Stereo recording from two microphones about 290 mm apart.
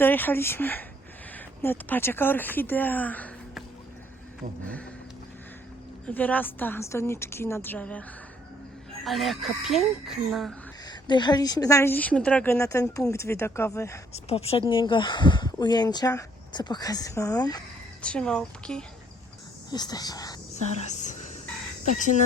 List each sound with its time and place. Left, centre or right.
0.0 s speech: centre
6.1 s speech: centre
9.0 s speech: centre
10.8 s speech: centre
14.1 s speech: left; by 18.9 s centre
19.7 s speech: centre
20.8 s a sound: left